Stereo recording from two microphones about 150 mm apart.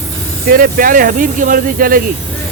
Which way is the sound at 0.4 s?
80° right.